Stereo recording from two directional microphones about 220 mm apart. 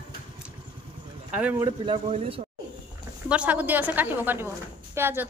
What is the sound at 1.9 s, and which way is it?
Speech, 30° right (ahead or behind).